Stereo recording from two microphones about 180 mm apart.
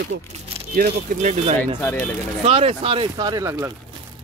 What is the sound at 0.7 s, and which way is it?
Speech, 50° right (ahead or behind).